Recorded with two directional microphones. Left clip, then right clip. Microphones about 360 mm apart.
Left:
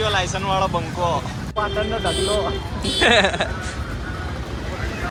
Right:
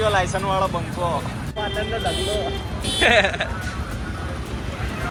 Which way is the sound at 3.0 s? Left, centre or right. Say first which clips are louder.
Left 1 dB; centre.